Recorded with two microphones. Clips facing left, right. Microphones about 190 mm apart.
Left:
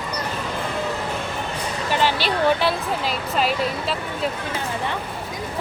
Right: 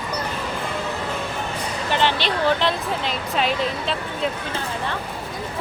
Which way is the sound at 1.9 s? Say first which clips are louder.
Even; 10° left (ahead or behind).